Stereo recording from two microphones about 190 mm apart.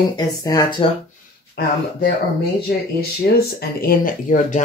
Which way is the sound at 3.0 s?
55° left (ahead or behind).